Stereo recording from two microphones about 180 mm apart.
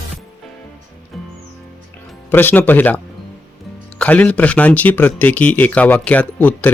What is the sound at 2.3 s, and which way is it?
Speech, 10° left (ahead or behind).